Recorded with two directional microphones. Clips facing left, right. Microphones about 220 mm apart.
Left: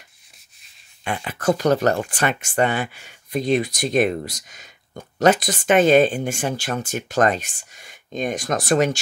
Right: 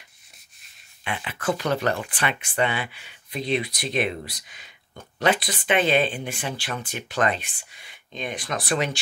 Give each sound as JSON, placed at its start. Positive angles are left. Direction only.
{"t": 1.0, "sound": "speech", "side_deg": 40}